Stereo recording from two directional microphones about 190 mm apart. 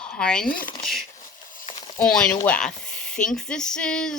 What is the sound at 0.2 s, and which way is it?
Speech, 5° left (ahead or behind).